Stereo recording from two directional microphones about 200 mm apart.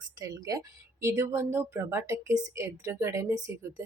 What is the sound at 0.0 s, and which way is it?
A woman's voice, 20° right (ahead or behind).